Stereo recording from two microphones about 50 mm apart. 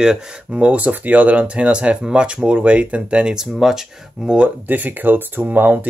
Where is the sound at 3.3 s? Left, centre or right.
Centre.